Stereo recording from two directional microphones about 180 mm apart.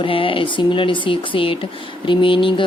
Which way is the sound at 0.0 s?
30° left (ahead or behind).